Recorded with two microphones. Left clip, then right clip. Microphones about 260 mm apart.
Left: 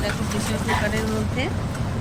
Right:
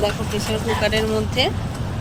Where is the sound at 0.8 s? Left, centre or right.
Right.